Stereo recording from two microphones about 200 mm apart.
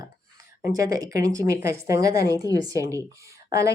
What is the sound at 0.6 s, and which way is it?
Speech, 15° right (ahead or behind).